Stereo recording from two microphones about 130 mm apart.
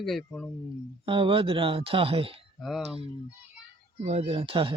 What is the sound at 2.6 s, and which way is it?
Speech, centre (ahead or behind).